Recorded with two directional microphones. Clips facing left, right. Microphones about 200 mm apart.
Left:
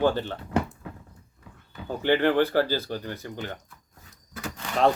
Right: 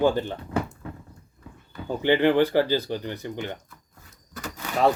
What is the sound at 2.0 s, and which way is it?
Speech, 15° right (ahead or behind).